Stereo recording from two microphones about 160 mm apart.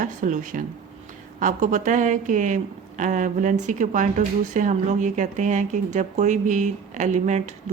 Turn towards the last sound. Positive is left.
turn(degrees=-50)  # may be behind; listen again after turning